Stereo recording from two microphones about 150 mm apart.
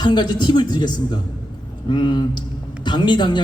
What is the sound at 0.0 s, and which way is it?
A man's voice, 30° left (ahead or behind).